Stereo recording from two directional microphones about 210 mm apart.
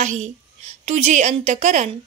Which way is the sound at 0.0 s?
35° right (ahead or behind).